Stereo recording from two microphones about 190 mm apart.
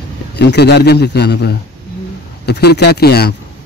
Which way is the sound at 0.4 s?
60° left (ahead or behind).